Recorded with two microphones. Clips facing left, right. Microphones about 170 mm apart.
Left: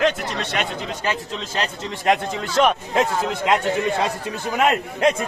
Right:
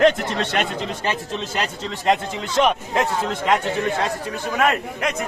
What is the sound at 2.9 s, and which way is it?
A man's voice, 10° left (ahead or behind).